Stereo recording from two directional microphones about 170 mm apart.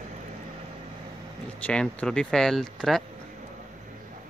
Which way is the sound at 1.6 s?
5° left (ahead or behind).